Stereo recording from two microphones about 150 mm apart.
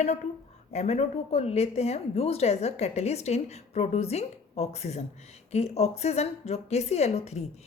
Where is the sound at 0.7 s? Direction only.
45° left (ahead or behind).